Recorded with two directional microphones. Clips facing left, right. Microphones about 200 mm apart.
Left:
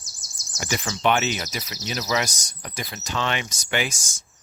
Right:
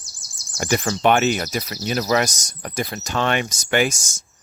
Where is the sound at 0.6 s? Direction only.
50° right (ahead or behind).